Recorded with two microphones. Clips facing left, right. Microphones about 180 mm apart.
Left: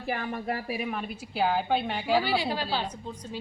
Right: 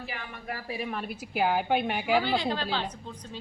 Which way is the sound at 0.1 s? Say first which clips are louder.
Left 8 dB; 45° left (ahead or behind).